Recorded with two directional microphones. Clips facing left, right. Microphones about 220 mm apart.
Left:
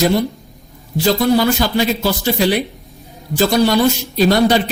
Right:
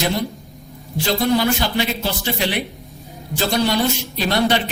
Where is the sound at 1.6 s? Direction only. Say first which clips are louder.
Left 5 dB; 40° left (ahead or behind).